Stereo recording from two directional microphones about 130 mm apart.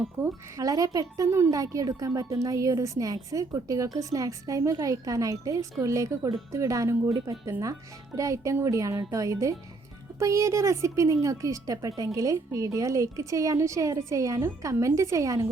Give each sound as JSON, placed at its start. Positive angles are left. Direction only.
{"t": 0.2, "sound": "speech", "side_deg": -25}